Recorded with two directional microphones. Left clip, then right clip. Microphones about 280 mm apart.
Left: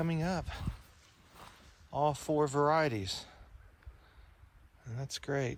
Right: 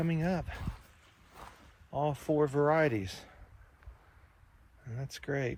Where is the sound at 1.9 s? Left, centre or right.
Centre.